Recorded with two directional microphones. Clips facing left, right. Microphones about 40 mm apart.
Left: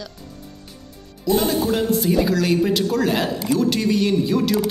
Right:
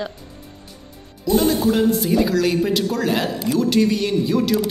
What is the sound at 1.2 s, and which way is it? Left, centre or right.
Speech, centre.